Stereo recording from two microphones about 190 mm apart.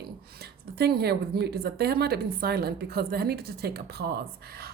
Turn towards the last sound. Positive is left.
turn(degrees=-55)  # may be behind; listen again after turning